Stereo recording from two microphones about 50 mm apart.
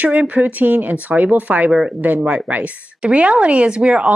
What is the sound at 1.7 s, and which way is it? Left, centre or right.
Speech, centre.